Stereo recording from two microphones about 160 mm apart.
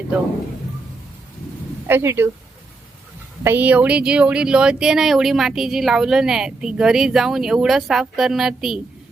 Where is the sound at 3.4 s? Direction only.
10° right (ahead or behind).